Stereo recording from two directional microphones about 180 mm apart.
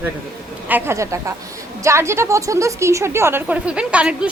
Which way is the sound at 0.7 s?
15° right (ahead or behind).